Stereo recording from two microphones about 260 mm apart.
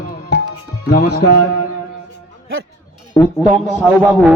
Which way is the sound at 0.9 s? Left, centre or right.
Left.